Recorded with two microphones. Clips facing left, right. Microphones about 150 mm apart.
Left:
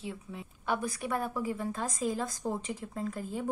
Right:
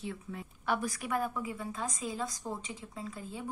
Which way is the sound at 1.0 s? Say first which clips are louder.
Left 1 dB; 35° left (ahead or behind).